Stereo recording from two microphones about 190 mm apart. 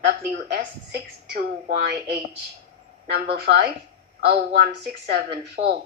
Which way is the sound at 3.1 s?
55° right (ahead or behind).